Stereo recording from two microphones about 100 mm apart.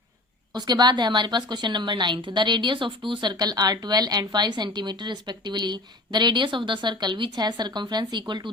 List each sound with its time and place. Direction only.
0.5 s a woman's voice: 45° right (ahead or behind)